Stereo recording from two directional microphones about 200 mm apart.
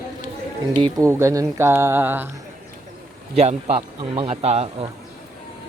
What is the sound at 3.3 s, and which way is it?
A man's voice, 35° right (ahead or behind).